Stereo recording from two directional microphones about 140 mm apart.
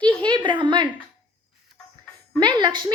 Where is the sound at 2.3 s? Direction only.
30° right (ahead or behind).